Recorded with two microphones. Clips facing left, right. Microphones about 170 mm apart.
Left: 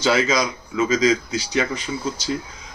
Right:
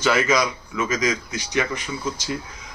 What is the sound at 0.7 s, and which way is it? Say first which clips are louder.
Speech: left 5 dB; 30° left (ahead or behind).